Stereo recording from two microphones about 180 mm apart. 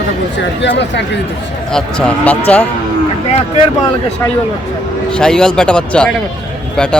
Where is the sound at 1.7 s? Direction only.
5° left (ahead or behind).